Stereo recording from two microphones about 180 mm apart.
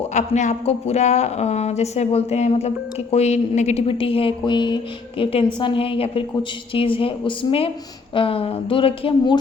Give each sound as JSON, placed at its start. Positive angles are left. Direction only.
{"t": 0.1, "sound": "speech", "side_deg": 40}